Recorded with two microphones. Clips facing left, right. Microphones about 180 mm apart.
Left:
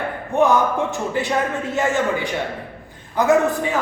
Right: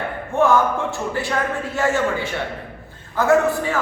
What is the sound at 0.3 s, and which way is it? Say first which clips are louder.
A man's voice: even; 20° left (ahead or behind).